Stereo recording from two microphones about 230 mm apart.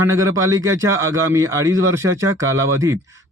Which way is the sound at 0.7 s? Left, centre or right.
Right.